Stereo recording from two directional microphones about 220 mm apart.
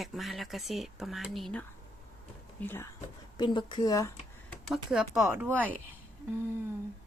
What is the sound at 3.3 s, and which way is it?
Speech, 20° left (ahead or behind).